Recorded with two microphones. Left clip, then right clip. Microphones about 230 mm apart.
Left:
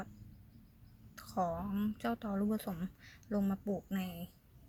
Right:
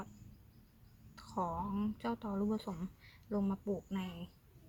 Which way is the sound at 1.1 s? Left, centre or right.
Centre.